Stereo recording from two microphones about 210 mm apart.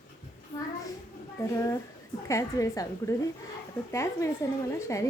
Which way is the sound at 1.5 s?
15° left (ahead or behind).